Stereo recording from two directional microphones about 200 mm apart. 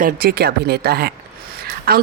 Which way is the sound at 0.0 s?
50° right (ahead or behind).